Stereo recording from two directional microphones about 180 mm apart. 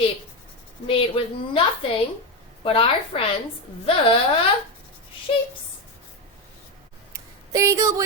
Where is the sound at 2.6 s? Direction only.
30° left (ahead or behind).